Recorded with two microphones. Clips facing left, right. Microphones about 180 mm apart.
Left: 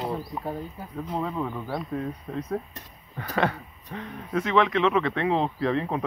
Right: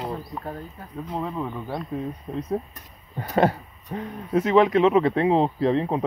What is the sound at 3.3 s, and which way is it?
Speech, 35° right (ahead or behind).